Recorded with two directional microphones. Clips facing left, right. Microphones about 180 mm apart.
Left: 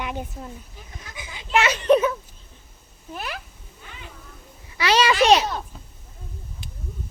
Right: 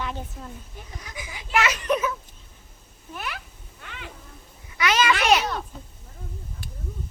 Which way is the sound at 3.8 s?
70° right (ahead or behind).